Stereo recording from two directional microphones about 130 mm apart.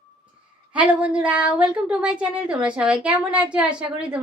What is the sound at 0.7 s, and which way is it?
Speech, 10° right (ahead or behind).